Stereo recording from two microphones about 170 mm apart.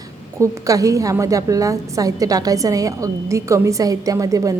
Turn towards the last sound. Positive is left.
turn(degrees=-20)  # may be behind; listen again after turning